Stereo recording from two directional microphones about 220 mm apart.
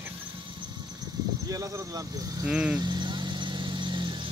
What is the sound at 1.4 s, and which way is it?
Speech, 15° right (ahead or behind).